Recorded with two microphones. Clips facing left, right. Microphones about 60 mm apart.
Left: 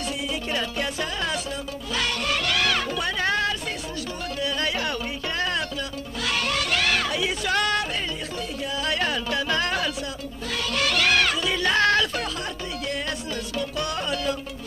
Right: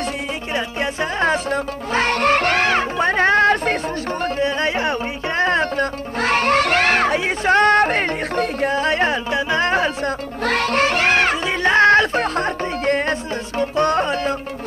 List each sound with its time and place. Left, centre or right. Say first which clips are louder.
1.2 s music: right 10 dB; right
4.2 s speech: right 7 dB; right
5.4 s music: right 11 dB; right
8.8 s music: right 7 dB; right
10.0 s music: right 11 dB; right